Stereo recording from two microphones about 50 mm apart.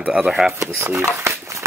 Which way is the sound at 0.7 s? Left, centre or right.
Right.